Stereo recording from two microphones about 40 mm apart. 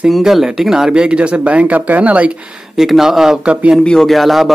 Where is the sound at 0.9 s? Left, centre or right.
Right.